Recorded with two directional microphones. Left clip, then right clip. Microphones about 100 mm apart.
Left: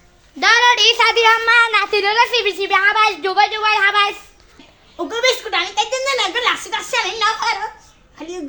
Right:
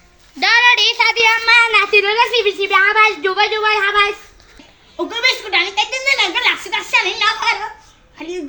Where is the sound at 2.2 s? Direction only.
80° left.